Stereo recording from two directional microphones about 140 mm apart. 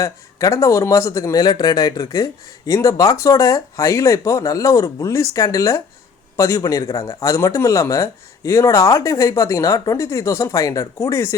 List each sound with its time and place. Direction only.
0.0 s a man's voice: 20° left (ahead or behind)